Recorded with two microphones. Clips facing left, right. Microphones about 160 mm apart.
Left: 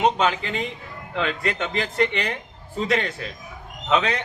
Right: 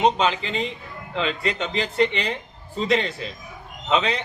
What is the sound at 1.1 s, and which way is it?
Speech, 15° right (ahead or behind).